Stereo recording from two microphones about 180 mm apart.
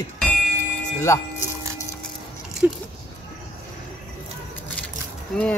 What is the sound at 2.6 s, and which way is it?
Speech, 10° right (ahead or behind).